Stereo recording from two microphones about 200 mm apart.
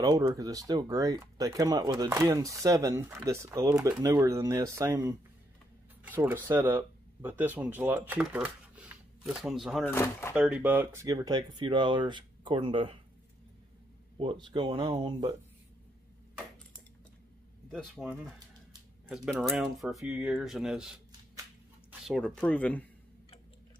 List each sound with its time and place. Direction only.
0.0 s speech: 15° right (ahead or behind); by 9.8 s centre (ahead or behind)
9.8 s speech: 10° left (ahead or behind)
10.3 s speech: 5° right (ahead or behind); by 12.9 s 25° right (ahead or behind)
14.1 s speech: 25° right (ahead or behind)
17.6 s speech: centre (ahead or behind)
22.0 s speech: centre (ahead or behind)